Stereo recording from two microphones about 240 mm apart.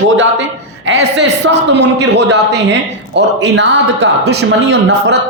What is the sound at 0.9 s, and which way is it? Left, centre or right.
Speech, right.